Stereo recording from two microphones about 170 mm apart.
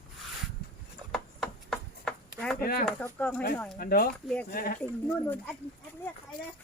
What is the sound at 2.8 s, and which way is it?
Speech, centre (ahead or behind).